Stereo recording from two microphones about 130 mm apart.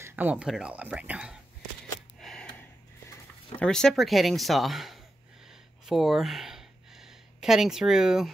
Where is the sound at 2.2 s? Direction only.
5° left (ahead or behind).